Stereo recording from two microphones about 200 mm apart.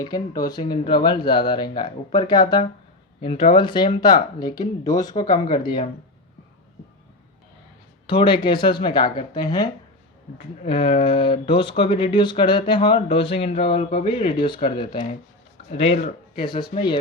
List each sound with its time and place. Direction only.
0.0 s speech: 20° left (ahead or behind)
8.0 s speech: 25° left (ahead or behind)